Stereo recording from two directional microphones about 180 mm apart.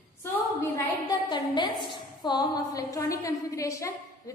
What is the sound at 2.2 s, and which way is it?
A woman's voice, 20° left (ahead or behind).